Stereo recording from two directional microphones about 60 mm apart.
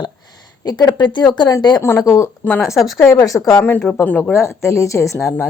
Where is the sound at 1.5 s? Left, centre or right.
Left.